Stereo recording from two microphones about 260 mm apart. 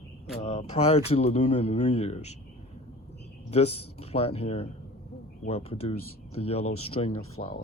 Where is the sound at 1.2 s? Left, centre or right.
Left.